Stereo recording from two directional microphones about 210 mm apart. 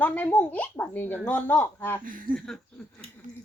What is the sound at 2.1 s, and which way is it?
Speech, 40° right (ahead or behind).